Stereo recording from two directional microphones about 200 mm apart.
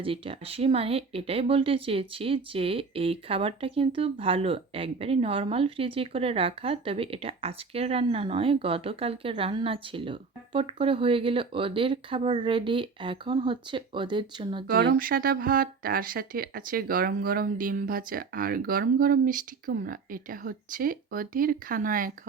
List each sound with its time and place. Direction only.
0.0 s speech: 25° right (ahead or behind)
14.7 s speech: 50° right (ahead or behind)